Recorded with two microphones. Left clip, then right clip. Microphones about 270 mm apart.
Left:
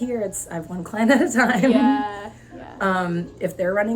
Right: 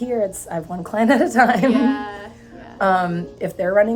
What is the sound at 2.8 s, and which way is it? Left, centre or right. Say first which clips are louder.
A woman's voice: right 5 dB; centre.